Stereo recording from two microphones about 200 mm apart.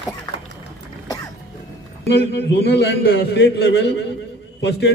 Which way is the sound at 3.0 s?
50° left (ahead or behind).